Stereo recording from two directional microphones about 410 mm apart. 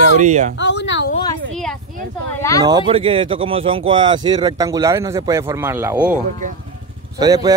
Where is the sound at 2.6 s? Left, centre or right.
Centre.